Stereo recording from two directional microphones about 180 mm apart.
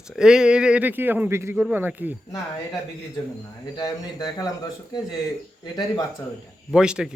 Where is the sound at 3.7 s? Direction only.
20° left (ahead or behind).